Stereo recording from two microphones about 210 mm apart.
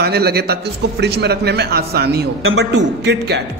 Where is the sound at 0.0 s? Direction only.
50° right (ahead or behind).